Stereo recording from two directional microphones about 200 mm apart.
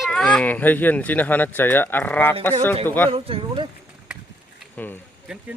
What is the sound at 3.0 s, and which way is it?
Speech, 25° right (ahead or behind).